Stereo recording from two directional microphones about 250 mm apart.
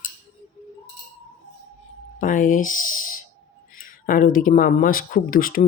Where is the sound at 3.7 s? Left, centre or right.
Left.